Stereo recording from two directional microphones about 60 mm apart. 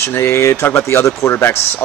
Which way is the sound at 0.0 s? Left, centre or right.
Left.